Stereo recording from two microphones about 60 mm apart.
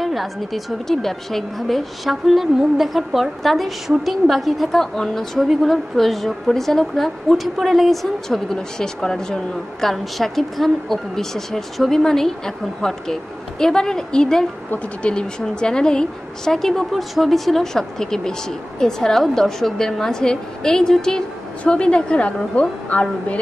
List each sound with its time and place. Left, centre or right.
0.0 s a woman's voice: centre; by 23.4 s left